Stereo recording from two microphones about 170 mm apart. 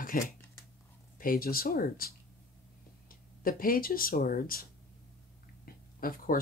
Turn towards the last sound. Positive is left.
turn(degrees=60)  # may be behind; listen again after turning